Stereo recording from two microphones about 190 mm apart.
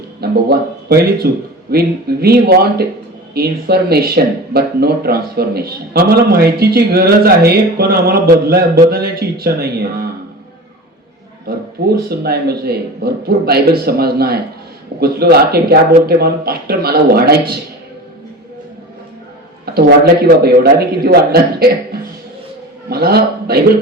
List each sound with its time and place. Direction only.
0.2 s speech: 55° right (ahead or behind)
11.9 s speech: 55° right (ahead or behind)
20.2 s speech: 55° right (ahead or behind)